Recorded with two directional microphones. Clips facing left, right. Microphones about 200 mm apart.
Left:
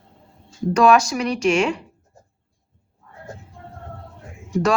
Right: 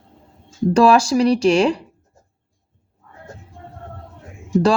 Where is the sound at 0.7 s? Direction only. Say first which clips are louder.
Right 2 dB; 30° right (ahead or behind).